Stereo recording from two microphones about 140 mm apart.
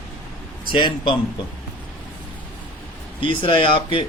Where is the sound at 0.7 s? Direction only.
35° left (ahead or behind).